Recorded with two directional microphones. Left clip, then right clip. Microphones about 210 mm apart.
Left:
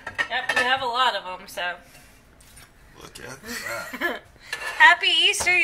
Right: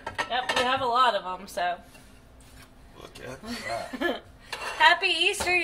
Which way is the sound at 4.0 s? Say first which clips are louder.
Left 2 dB; 10° right (ahead or behind).